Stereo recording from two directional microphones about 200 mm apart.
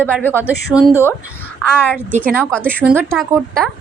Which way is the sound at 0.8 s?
5° right (ahead or behind).